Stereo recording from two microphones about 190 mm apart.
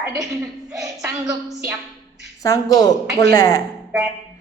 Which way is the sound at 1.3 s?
15° right (ahead or behind).